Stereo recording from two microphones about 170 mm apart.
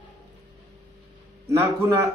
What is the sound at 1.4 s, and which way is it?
Speech, 15° right (ahead or behind).